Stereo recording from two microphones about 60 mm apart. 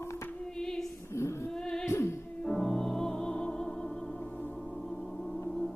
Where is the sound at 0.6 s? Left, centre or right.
Centre.